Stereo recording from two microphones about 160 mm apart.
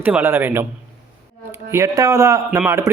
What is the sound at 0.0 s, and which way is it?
Speech, 10° right (ahead or behind).